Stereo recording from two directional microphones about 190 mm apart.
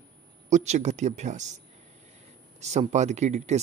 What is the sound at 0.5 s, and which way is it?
Speech, 40° right (ahead or behind).